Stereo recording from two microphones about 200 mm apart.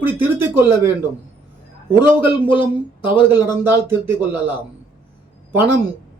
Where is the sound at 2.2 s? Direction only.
25° left (ahead or behind).